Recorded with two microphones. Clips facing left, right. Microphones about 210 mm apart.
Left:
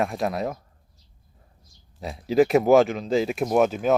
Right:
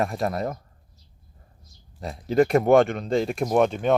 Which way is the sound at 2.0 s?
Centre (ahead or behind).